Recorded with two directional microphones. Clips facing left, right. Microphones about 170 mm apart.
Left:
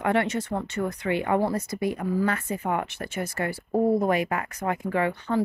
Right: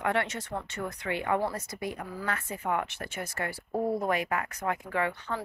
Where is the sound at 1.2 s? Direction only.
30° left (ahead or behind).